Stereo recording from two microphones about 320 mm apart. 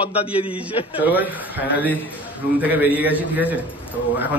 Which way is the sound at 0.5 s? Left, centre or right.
Centre.